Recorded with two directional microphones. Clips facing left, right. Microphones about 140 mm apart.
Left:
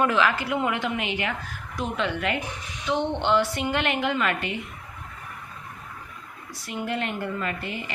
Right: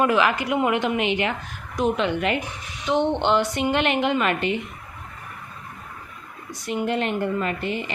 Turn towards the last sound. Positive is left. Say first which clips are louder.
# right 5 dB
turn(degrees=-20)  # may be behind; listen again after turning